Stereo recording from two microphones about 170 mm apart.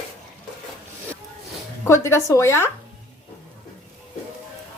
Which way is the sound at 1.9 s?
15° left (ahead or behind).